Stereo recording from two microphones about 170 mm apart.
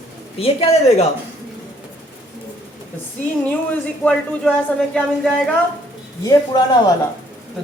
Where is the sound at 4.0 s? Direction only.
10° left (ahead or behind).